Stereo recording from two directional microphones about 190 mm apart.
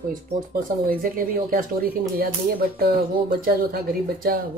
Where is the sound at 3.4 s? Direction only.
50° right (ahead or behind).